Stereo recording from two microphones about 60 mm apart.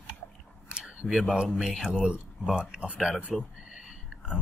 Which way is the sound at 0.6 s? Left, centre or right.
Centre.